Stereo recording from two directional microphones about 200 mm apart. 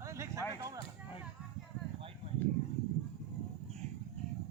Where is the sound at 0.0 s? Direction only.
15° right (ahead or behind).